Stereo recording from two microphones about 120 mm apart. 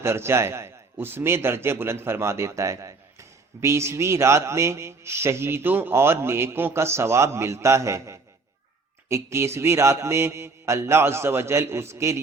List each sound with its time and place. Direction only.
0.0 s a man's voice: 20° right (ahead or behind)